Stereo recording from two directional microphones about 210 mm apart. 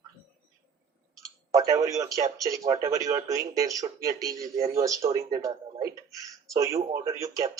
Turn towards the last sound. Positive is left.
turn(degrees=-15)  # may be behind; listen again after turning